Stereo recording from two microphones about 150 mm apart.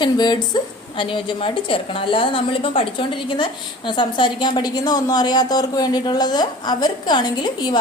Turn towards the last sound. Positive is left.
turn(degrees=30)  # may be behind; listen again after turning